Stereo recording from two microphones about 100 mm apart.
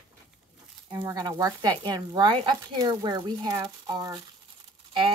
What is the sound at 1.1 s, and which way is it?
Speech, 40° right (ahead or behind).